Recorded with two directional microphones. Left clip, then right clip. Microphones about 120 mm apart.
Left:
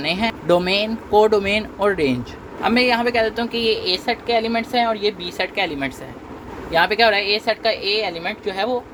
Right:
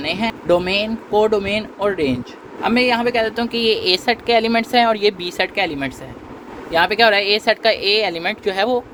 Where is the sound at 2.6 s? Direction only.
5° right (ahead or behind).